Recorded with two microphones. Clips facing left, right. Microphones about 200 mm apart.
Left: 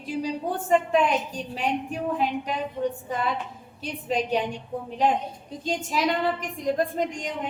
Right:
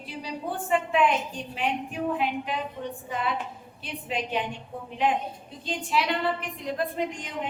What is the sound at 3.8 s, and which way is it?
A woman's voice, 40° left (ahead or behind).